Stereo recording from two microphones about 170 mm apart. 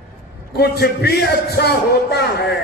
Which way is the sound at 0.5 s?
70° left (ahead or behind).